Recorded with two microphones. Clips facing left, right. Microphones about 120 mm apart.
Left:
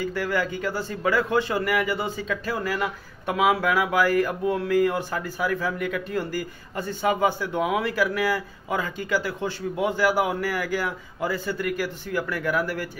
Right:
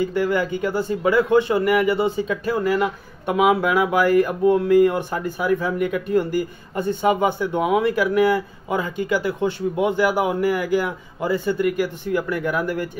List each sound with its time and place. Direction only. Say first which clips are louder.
0.0 s a man's voice: right 5 dB; 20° right (ahead or behind)